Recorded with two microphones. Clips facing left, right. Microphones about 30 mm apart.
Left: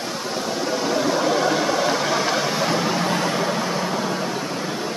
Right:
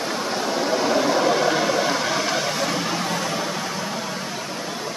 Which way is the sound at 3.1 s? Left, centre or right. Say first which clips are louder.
Left 3 dB; centre.